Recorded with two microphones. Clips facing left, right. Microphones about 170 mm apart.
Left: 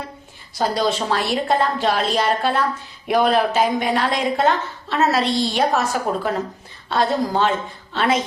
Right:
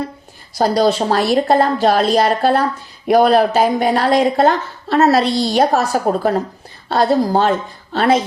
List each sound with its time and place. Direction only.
0.5 s speech: 40° right (ahead or behind)